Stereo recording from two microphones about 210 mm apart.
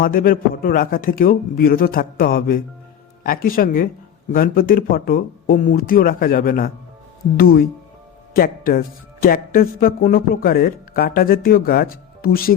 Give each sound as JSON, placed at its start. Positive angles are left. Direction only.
{"t": 0.0, "sound": "speech", "side_deg": 45}